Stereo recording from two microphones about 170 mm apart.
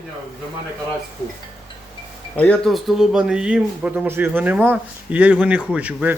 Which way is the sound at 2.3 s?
5° left (ahead or behind).